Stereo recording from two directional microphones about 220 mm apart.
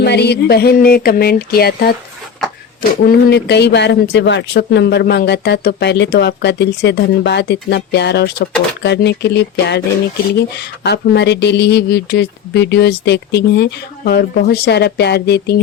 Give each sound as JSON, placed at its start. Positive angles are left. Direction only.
{"t": 0.0, "sound": "speech", "side_deg": 50}
{"t": 3.1, "sound": "speech", "side_deg": 50}